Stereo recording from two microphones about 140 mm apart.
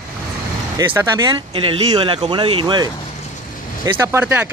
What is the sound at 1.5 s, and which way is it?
Speech, 40° right (ahead or behind).